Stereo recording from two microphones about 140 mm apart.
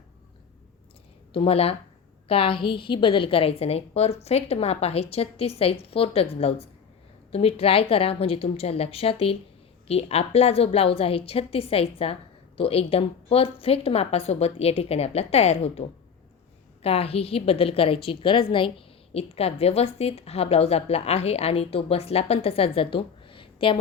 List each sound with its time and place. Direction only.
1.3 s a woman's voice: 45° left (ahead or behind)